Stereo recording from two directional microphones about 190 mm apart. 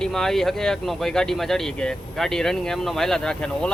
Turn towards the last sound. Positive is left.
turn(degrees=5)  # may be behind; listen again after turning